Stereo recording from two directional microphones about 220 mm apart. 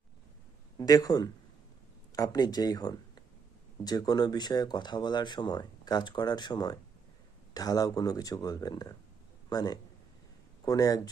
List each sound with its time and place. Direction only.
0.8 s speech: 15° left (ahead or behind)